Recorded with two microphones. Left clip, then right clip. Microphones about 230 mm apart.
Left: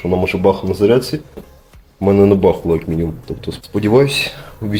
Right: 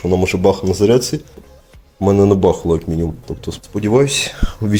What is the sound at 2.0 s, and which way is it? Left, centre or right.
Speech, right.